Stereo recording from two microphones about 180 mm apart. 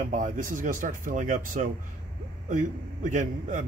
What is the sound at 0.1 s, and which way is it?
Speech, 45° right (ahead or behind).